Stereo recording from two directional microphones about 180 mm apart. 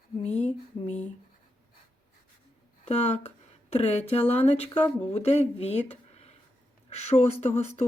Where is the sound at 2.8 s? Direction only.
40° left (ahead or behind).